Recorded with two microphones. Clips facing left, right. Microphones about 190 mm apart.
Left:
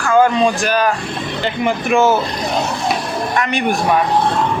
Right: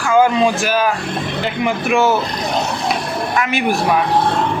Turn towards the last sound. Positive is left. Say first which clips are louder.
# even
turn(degrees=-5)  # may be behind; listen again after turning